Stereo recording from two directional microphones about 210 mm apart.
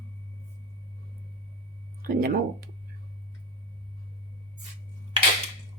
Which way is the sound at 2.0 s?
45° right (ahead or behind).